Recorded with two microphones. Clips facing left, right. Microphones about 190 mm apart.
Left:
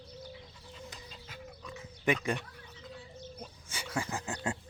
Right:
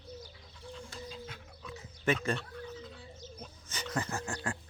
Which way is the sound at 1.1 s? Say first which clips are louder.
Right 3 dB; centre (ahead or behind).